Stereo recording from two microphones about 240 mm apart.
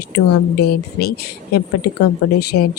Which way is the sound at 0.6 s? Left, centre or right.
Left.